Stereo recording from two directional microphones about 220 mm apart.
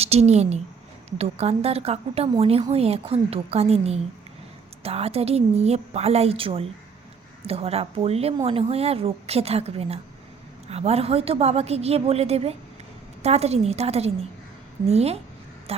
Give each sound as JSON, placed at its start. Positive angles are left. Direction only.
{"t": 0.0, "sound": "a woman's voice", "side_deg": -30}